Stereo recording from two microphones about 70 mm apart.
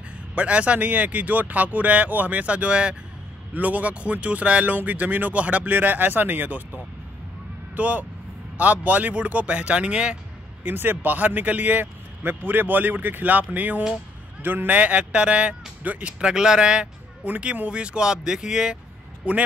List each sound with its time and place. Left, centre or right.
0.3 s speech: centre
10.6 s speech: right